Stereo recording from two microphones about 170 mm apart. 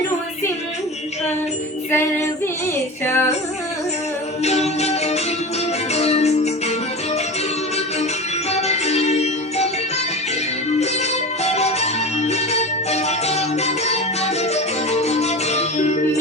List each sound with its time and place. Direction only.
3.1 s female singing: 15° left (ahead or behind)
4.4 s music: 40° left (ahead or behind)
8.4 s music: 40° left (ahead or behind)
11.4 s music: 40° left (ahead or behind)